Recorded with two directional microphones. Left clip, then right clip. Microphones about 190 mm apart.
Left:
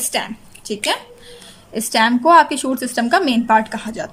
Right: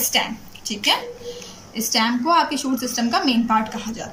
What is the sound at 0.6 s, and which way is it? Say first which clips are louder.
A woman's voice: right 1 dB; 55° left (ahead or behind).